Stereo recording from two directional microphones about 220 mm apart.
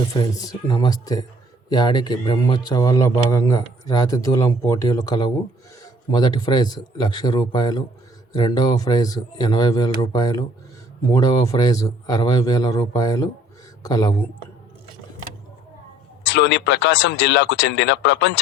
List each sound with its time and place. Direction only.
0.1 s speech: 15° left (ahead or behind)
16.2 s speech: 55° left (ahead or behind)